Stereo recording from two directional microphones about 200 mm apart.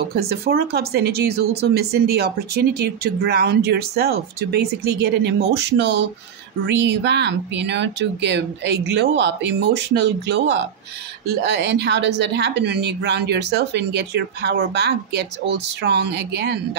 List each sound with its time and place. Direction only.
0.0 s speech: 50° right (ahead or behind)
11.4 s speech: 55° right (ahead or behind)